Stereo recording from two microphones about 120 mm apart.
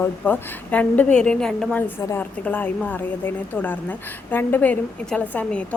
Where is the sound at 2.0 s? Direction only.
20° left (ahead or behind).